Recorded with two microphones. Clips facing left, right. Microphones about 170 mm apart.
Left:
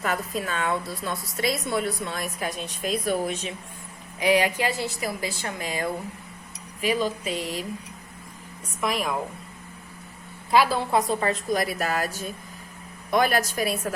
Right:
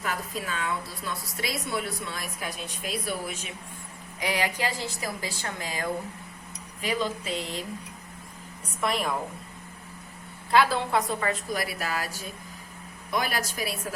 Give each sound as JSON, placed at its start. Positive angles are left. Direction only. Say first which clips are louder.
{"t": 0.0, "sound": "a woman's voice", "louder": "left 5 dB", "side_deg": 55}
{"t": 4.2, "sound": "a woman's voice", "louder": "left 6 dB", "side_deg": 15}
{"t": 8.8, "sound": "a woman's voice", "louder": "left 1 dB", "side_deg": 0}
{"t": 10.5, "sound": "a woman's voice", "louder": "left 2 dB", "side_deg": 20}
{"t": 11.2, "sound": "a woman's voice", "louder": "left 4 dB", "side_deg": 45}
{"t": 13.1, "sound": "a woman's voice", "louder": "left 7 dB", "side_deg": 55}